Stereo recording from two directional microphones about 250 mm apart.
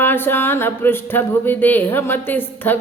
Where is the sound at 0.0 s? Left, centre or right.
Centre.